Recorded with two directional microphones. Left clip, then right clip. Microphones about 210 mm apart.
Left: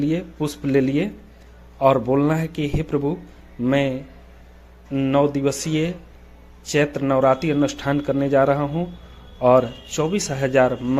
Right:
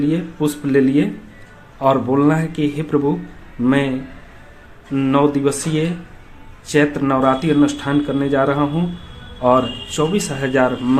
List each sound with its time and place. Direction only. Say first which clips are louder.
0.0 s speech: right 4 dB; 35° left (ahead or behind)
4.9 s speech: right 3 dB; 30° left (ahead or behind)